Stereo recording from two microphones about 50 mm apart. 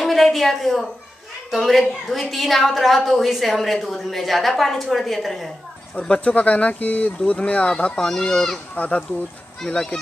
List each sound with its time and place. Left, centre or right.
0.0 s a sound: centre
1.5 s a woman's voice: centre
5.9 s speech: centre
8.7 s speech: left
9.6 s speech: centre